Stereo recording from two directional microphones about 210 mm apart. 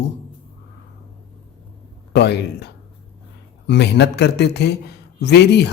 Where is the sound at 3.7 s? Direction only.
55° left (ahead or behind).